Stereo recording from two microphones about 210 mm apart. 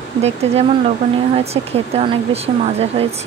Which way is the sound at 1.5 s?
30° right (ahead or behind).